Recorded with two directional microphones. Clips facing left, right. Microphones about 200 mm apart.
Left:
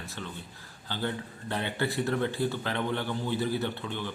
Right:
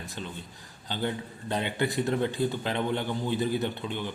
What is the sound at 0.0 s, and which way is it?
A man's voice, 15° right (ahead or behind).